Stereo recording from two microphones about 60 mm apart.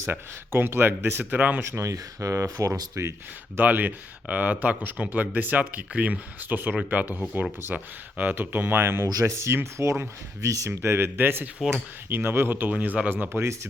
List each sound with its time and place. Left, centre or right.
0.0 s speech: right
1.3 s speech: right
1.7 s speech: right
2.6 s speech: right
3.6 s speech: right
9.2 s speech: right
12.7 s speech: right